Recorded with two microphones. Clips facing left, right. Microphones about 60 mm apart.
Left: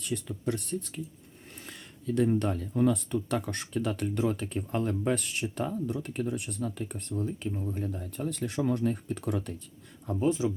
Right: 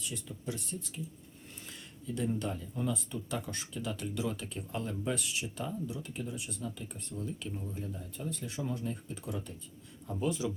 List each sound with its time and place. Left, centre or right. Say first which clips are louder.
0.0 s speech: left 8 dB; left
1.6 s a sound: left 7 dB; left
2.4 s speech: left 9 dB; left
7.2 s speech: left 6 dB; left
7.5 s speech: left 6 dB; left
7.8 s speech: left 7 dB; left
10.2 s speech: left 6 dB; left